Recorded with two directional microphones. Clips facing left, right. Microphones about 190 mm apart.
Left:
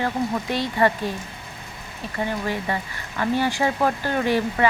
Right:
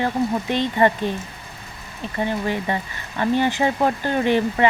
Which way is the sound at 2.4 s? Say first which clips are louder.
Right 2 dB; 20° right (ahead or behind).